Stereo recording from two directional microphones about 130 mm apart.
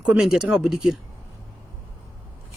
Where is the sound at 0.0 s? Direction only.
5° right (ahead or behind).